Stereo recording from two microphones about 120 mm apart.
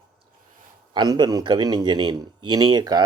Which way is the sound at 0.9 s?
35° right (ahead or behind).